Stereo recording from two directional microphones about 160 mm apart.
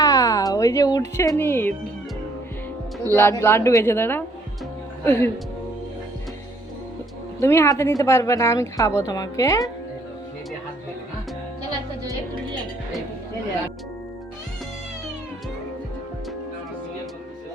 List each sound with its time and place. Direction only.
0.0 s speech: 20° left (ahead or behind)
3.1 s speech: 15° left (ahead or behind)
7.3 s a woman's voice: 15° left (ahead or behind)